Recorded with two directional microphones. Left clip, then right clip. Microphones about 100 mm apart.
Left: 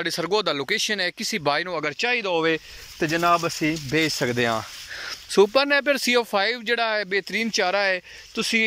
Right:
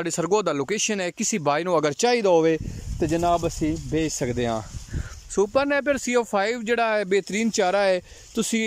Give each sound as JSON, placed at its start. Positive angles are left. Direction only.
{"t": 0.0, "sound": "speech", "side_deg": -25}
{"t": 1.8, "sound": "speech", "side_deg": -60}
{"t": 5.3, "sound": "speech", "side_deg": -20}
{"t": 8.4, "sound": "speech", "side_deg": -55}